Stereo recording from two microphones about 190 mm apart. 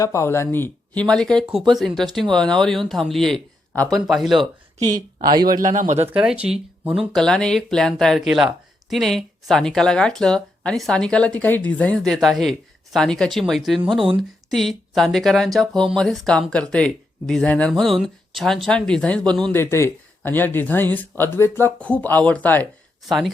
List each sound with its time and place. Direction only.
0.0 s speech: 15° left (ahead or behind); by 4.4 s centre (ahead or behind)
5.2 s a man's voice: 20° right (ahead or behind)
5.7 s speech: 40° right (ahead or behind)
6.1 s speech: 5° right (ahead or behind)